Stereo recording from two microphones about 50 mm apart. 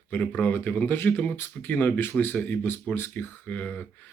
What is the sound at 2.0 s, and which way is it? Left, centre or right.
Speech, left.